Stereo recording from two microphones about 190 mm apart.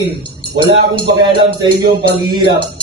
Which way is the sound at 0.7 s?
25° right (ahead or behind).